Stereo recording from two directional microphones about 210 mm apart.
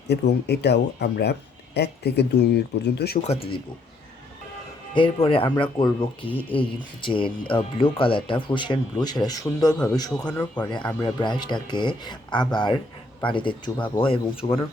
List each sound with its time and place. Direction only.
0.1 s speech: 50° left (ahead or behind)
3.2 s speech: 30° left (ahead or behind)
4.9 s speech: 25° left (ahead or behind)